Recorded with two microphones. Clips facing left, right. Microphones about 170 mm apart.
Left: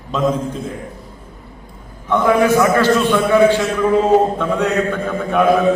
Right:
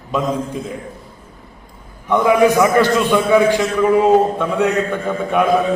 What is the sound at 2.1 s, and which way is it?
A man's voice, 15° right (ahead or behind).